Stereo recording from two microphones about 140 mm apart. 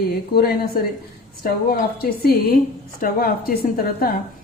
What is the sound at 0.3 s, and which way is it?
A woman's voice, 90° left.